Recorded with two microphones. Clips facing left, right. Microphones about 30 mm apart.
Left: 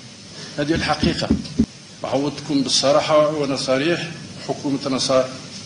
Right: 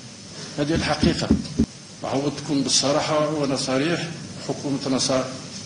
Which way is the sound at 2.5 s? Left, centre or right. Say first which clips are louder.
Left 5 dB; left.